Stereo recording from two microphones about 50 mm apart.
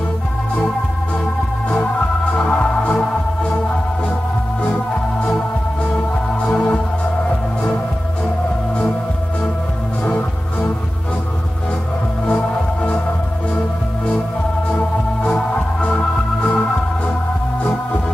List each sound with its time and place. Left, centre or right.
2.3 s music: left
6.4 s music: left
10.0 s music: left
12.3 s music: left
15.9 s organ: left